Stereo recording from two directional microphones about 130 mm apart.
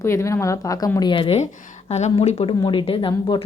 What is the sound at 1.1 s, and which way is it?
Speech, 45° left (ahead or behind).